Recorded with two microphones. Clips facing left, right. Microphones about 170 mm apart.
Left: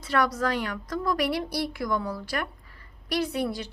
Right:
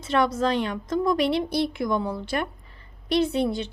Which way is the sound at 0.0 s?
25° right (ahead or behind).